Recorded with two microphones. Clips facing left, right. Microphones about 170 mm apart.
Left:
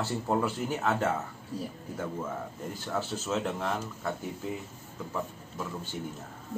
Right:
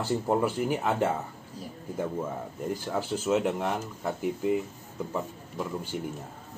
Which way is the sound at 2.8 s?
15° right (ahead or behind).